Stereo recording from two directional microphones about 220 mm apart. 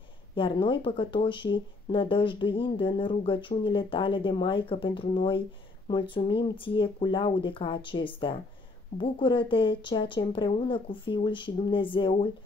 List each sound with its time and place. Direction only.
0.4 s speech: 20° left (ahead or behind)